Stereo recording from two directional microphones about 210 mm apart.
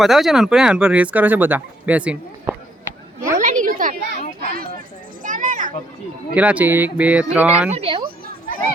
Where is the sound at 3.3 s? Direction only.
35° right (ahead or behind).